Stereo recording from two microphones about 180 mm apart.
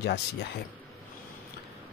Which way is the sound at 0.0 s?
65° left (ahead or behind).